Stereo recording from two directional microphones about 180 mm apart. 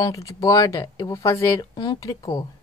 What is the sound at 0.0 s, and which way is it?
Speech, 20° left (ahead or behind).